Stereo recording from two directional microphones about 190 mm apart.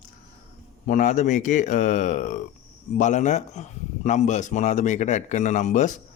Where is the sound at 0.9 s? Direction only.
40° left (ahead or behind).